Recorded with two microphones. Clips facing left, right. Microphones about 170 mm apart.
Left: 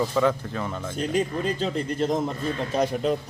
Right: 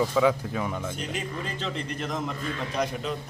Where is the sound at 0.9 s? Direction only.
40° left (ahead or behind).